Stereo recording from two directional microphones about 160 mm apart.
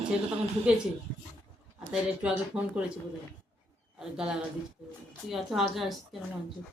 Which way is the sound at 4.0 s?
5° right (ahead or behind).